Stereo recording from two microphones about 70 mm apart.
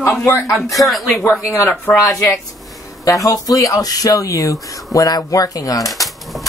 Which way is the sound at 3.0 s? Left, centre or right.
Left.